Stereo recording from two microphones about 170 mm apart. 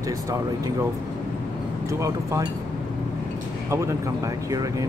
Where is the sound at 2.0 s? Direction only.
20° right (ahead or behind).